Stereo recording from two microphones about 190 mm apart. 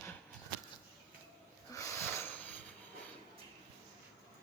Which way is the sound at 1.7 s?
15° left (ahead or behind).